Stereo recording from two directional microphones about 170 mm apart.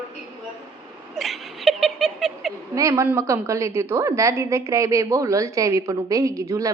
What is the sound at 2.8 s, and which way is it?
A woman's voice, 20° right (ahead or behind).